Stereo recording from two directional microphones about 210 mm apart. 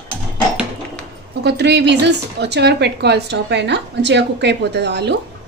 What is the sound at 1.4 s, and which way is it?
Speech, 55° right (ahead or behind).